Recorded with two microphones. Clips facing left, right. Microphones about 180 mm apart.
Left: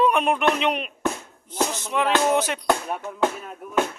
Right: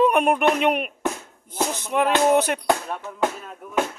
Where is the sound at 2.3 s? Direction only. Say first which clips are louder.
Right 3 dB; 55° right (ahead or behind).